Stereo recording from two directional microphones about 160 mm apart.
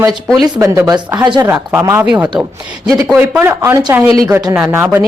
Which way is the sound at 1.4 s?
10° right (ahead or behind).